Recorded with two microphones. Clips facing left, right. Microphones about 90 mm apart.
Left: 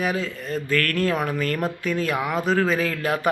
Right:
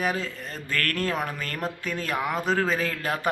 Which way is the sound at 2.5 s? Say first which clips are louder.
Left 5 dB; 35° right (ahead or behind).